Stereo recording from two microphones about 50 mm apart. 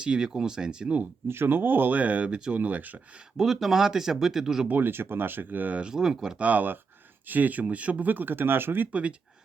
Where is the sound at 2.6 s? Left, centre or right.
Right.